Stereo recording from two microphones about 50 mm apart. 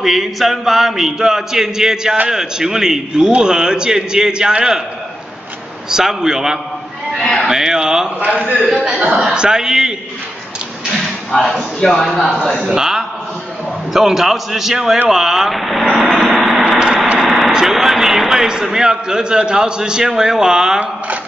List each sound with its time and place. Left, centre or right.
0.0 s a man's voice: centre
5.9 s a man's voice: centre
8.2 s a man's voice: right
9.1 s a man's voice: centre
11.3 s speech: centre
12.6 s a man's voice: centre
16.2 s vehicle: centre
17.6 s a man's voice: centre